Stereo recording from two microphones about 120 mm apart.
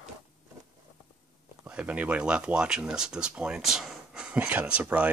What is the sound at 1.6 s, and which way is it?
Speech, 10° right (ahead or behind).